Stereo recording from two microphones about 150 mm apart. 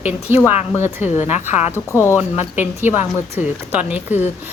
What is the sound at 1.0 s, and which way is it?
Speech, 50° left (ahead or behind).